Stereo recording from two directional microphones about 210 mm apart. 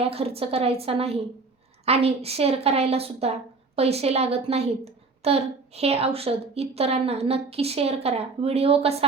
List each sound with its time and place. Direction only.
0.0 s a woman's voice: 30° right (ahead or behind)